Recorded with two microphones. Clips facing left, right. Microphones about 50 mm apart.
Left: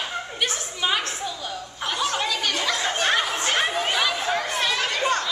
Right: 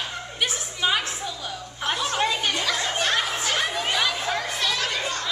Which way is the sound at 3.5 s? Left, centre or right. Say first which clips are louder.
Left 2 dB; centre.